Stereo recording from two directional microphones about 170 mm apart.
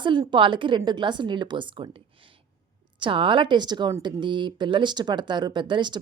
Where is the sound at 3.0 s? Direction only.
30° right (ahead or behind).